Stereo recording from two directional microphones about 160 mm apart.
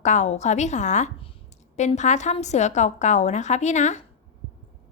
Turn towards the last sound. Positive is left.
turn(degrees=45)  # may be behind; listen again after turning